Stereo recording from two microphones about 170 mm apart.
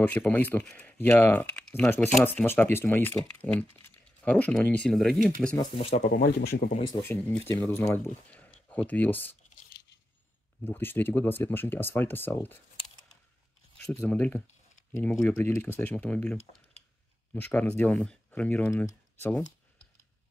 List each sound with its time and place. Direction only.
0.0 s speech: 10° left (ahead or behind)
5.6 s speech: 30° left (ahead or behind)
6.0 s speech: 70° left (ahead or behind)
6.9 s speech: 15° left (ahead or behind)
10.6 s speech: 10° left (ahead or behind)
13.7 s speech: 10° left (ahead or behind)